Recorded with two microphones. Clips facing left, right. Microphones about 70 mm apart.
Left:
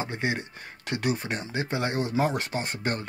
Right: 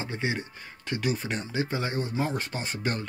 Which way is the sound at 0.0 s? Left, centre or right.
Left.